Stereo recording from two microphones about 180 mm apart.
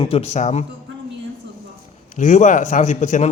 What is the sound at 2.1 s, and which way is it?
A man's voice, 40° left (ahead or behind).